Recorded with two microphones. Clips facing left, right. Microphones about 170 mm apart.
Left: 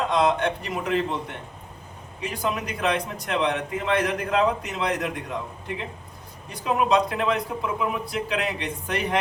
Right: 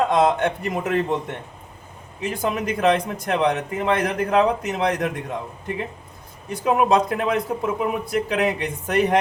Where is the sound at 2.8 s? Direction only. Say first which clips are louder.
Right 6 dB; 45° right (ahead or behind).